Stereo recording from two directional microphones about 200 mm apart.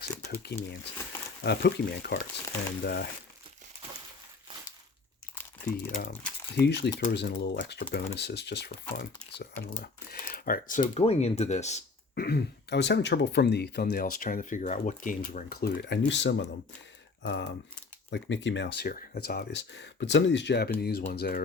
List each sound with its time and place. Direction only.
0.0 s a sound: 50° left (ahead or behind)
0.5 s speech: 15° left (ahead or behind)
1.5 s speech: 55° left (ahead or behind)
5.8 s speech: 50° left (ahead or behind); by 11.8 s 35° left (ahead or behind)
12.1 s speech: 50° left (ahead or behind)
21.1 s speech: 50° left (ahead or behind)